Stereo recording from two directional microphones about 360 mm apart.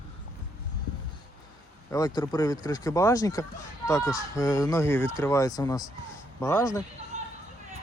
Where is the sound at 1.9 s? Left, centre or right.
Centre.